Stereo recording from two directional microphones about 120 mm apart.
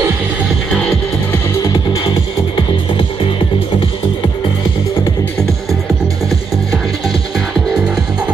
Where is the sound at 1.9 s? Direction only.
45° left (ahead or behind).